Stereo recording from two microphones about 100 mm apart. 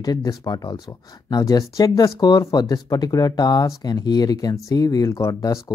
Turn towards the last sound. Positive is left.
turn(degrees=35)  # may be behind; listen again after turning